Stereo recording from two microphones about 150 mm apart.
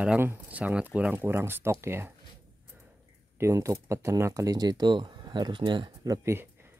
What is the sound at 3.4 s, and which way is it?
Speech, 20° right (ahead or behind).